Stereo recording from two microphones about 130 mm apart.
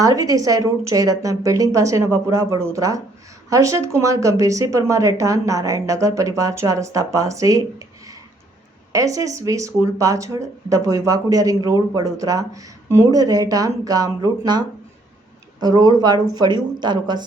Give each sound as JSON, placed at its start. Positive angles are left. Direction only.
{"t": 0.0, "sound": "speech", "side_deg": -25}
{"t": 15.6, "sound": "speech", "side_deg": -30}